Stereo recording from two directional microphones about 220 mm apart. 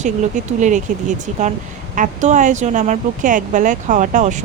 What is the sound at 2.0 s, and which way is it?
Speech, 35° right (ahead or behind).